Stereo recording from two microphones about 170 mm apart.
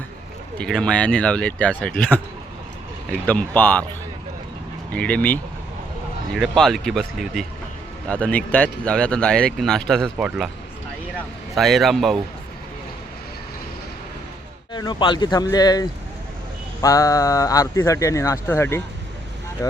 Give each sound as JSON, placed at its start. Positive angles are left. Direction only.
{"t": 0.6, "sound": "speech", "side_deg": 5}
{"t": 4.9, "sound": "speech", "side_deg": 10}
{"t": 6.6, "sound": "speech", "side_deg": 0}
{"t": 11.5, "sound": "speech", "side_deg": 0}
{"t": 14.7, "sound": "speech", "side_deg": 25}